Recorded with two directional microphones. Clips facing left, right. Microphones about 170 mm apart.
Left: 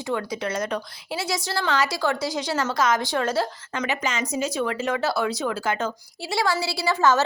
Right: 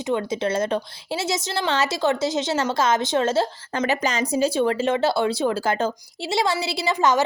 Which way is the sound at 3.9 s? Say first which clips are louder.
Right 4 dB; 35° right (ahead or behind).